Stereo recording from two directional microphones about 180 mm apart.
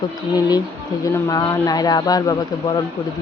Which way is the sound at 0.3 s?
20° left (ahead or behind).